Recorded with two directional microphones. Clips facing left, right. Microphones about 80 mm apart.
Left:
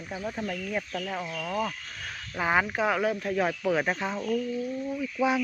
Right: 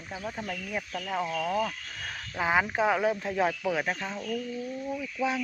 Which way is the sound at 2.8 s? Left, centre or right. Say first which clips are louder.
Right 1 dB; centre.